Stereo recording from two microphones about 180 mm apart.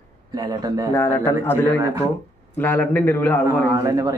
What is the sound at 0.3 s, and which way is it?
Speech, 20° right (ahead or behind).